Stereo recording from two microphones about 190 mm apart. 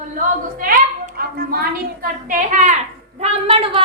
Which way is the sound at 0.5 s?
50° right (ahead or behind).